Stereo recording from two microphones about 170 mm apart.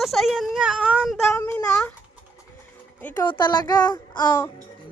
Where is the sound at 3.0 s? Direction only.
10° left (ahead or behind).